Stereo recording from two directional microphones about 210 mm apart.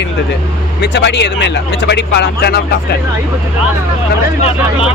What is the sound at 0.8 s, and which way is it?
Speech, 55° left (ahead or behind).